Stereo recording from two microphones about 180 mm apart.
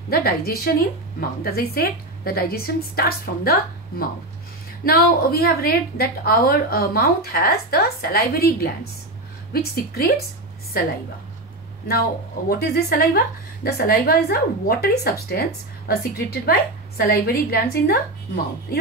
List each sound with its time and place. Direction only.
0.1 s a woman's voice: 55° left (ahead or behind)
4.8 s a woman's voice: 55° left (ahead or behind)
12.4 s a woman's voice: 55° left (ahead or behind)